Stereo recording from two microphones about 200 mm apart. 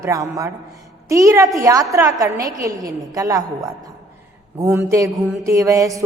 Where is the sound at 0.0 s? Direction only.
15° right (ahead or behind).